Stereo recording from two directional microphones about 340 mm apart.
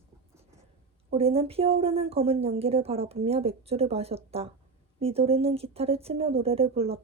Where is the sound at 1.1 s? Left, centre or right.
Centre.